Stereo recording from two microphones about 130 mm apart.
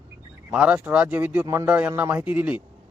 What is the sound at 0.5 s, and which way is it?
A man's voice, 10° right (ahead or behind).